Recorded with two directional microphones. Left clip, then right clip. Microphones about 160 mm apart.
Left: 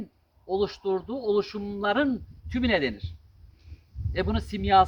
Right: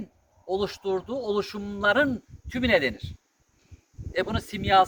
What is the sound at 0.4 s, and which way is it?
Speech, 35° right (ahead or behind).